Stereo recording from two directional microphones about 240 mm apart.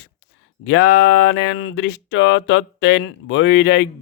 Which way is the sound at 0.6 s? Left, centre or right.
Left.